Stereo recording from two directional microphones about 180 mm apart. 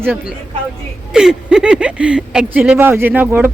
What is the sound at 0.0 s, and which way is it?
Speech, 10° right (ahead or behind).